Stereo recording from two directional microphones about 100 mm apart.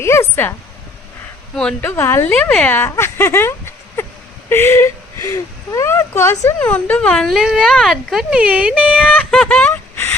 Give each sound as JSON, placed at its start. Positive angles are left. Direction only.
{"t": 0.0, "sound": "a woman's voice", "side_deg": 25}
{"t": 1.8, "sound": "a woman's voice", "side_deg": 25}
{"t": 4.0, "sound": "a sound", "side_deg": 25}
{"t": 4.4, "sound": "speech", "side_deg": 25}
{"t": 6.6, "sound": "speech", "side_deg": 15}
{"t": 7.3, "sound": "speech", "side_deg": -5}
{"t": 7.6, "sound": "speech", "side_deg": 10}
{"t": 7.9, "sound": "speech", "side_deg": -5}
{"t": 8.4, "sound": "speech", "side_deg": -15}
{"t": 9.0, "sound": "a sound", "side_deg": 15}